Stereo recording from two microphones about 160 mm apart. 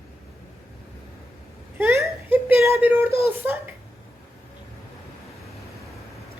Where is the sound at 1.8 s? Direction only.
15° right (ahead or behind).